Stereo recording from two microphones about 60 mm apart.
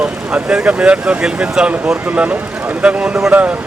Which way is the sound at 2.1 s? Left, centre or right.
Right.